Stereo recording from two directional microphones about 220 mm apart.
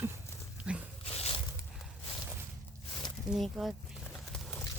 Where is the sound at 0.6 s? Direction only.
5° right (ahead or behind).